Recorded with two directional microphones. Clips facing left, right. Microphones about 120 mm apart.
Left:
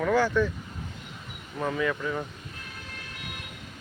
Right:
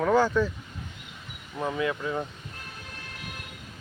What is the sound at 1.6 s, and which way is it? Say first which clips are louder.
Speech: even; 15° right (ahead or behind).